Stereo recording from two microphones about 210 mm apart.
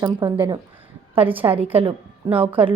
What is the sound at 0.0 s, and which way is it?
Speech, 20° right (ahead or behind).